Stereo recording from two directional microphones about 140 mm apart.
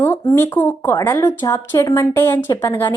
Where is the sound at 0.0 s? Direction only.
15° left (ahead or behind).